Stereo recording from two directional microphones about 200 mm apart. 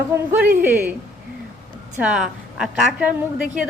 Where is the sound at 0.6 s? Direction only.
10° right (ahead or behind).